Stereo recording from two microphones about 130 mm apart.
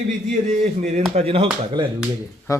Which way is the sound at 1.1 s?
50° right (ahead or behind).